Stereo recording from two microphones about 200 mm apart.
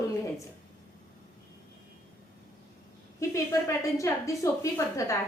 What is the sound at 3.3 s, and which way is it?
A woman's voice, 15° left (ahead or behind).